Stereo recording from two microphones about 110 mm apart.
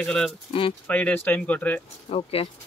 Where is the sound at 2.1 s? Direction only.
60° left (ahead or behind).